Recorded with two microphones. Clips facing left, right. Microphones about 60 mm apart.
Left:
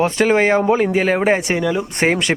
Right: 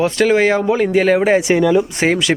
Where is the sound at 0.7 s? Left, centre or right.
Centre.